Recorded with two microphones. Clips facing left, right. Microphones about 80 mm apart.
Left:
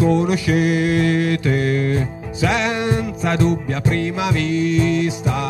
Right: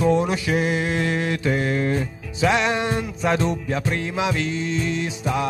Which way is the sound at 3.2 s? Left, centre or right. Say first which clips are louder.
Left 2 dB; centre.